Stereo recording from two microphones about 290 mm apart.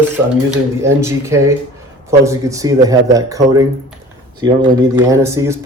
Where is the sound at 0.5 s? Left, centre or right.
Centre.